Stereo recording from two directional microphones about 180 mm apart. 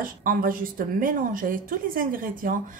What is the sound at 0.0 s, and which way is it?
A woman's voice, 50° right (ahead or behind).